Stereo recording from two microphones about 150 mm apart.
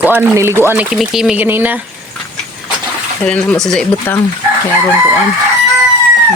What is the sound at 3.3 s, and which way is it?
Speech, 5° left (ahead or behind).